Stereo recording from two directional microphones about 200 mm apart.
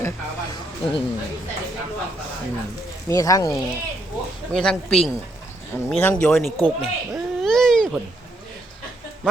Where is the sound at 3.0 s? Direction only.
15° left (ahead or behind).